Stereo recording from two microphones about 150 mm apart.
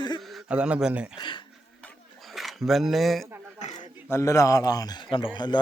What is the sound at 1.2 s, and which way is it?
Speech, 35° left (ahead or behind).